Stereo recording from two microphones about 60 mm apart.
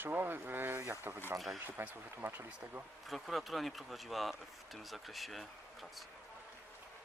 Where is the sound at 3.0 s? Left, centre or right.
Centre.